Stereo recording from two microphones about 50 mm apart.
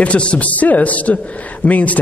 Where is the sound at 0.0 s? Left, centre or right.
Left.